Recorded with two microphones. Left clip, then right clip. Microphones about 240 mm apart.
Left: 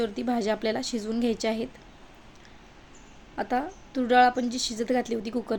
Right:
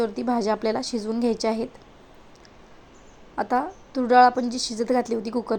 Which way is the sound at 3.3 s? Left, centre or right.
Centre.